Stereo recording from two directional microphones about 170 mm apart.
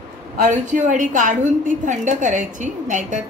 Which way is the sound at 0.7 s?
50° right (ahead or behind).